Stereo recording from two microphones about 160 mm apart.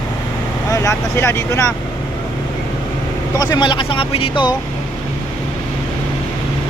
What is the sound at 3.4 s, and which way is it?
Speech, 25° left (ahead or behind).